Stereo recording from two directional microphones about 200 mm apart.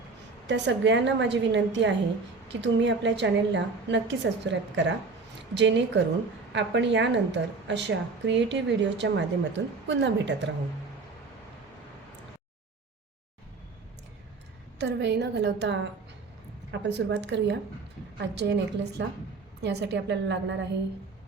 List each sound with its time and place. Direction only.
0.4 s a woman's voice: 65° right (ahead or behind)
14.8 s a woman's voice: 55° right (ahead or behind)